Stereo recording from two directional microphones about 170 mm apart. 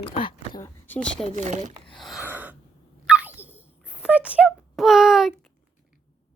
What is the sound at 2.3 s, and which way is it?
Gasp, 10° right (ahead or behind).